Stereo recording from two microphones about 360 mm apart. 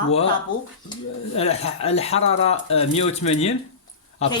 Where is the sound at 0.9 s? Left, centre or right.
Centre.